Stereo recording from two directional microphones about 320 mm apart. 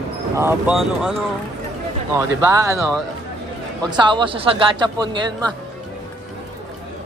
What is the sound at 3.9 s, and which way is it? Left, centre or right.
Speech, centre.